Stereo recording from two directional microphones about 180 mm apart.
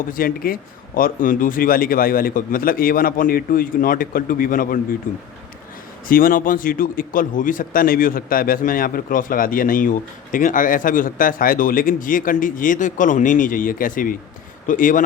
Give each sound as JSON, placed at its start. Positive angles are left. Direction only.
{"t": 0.1, "sound": "speech", "side_deg": 50}
{"t": 6.1, "sound": "speech", "side_deg": 50}